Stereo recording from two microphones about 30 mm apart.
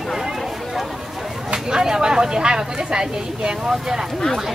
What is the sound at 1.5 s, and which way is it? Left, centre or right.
Speech, right.